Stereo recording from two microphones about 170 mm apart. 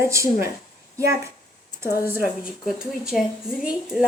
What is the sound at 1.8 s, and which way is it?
Speech, 15° right (ahead or behind).